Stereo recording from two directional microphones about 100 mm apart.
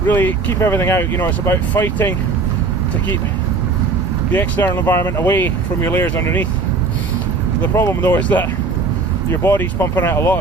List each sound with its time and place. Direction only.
0.1 s speech: 20° left (ahead or behind)
4.3 s speech: 15° left (ahead or behind)
7.6 s speech: 25° left (ahead or behind)